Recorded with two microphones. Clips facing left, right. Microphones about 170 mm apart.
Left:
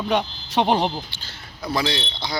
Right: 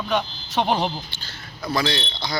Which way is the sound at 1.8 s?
10° left (ahead or behind).